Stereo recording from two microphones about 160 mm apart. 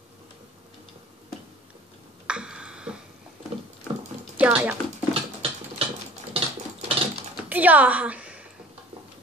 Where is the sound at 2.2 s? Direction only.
5° right (ahead or behind).